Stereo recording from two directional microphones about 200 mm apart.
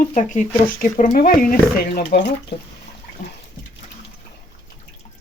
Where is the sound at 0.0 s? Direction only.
40° left (ahead or behind).